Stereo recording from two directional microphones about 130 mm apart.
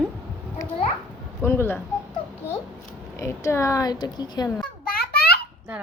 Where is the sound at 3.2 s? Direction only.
20° left (ahead or behind).